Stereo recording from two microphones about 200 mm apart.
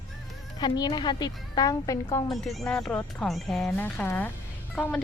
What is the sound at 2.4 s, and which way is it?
Speech, centre (ahead or behind).